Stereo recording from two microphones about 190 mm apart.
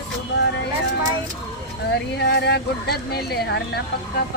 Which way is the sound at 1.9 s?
60° left (ahead or behind).